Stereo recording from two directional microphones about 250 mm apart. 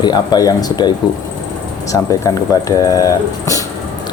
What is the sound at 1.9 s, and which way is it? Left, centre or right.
Speech, centre.